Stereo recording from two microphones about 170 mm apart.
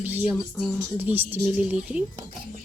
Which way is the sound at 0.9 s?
10° right (ahead or behind).